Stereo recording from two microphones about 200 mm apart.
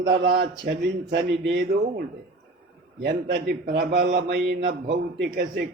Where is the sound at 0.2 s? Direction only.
55° right (ahead or behind).